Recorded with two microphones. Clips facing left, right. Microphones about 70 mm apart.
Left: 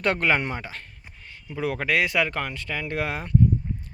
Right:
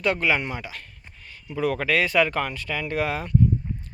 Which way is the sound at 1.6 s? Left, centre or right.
Centre.